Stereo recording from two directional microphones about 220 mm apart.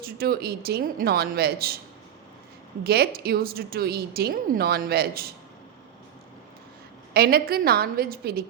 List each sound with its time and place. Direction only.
0.0 s a woman's voice: 45° right (ahead or behind)
2.8 s a woman's voice: 45° right (ahead or behind)
7.1 s a woman's voice: 45° right (ahead or behind)